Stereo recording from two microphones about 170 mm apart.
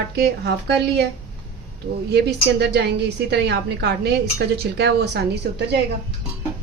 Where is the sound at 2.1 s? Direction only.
75° right (ahead or behind).